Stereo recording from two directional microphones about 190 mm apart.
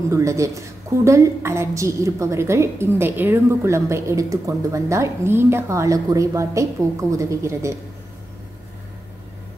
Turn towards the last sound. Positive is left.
turn(degrees=-15)  # may be behind; listen again after turning